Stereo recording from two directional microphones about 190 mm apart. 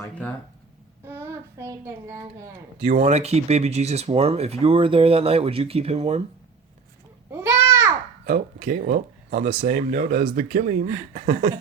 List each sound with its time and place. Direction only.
0.0 s a sound: 5° left (ahead or behind)
1.0 s child singing: 10° right (ahead or behind)
2.8 s speech: 35° right (ahead or behind)
7.3 s babbling: 15° right (ahead or behind)
8.3 s speech: 40° right (ahead or behind)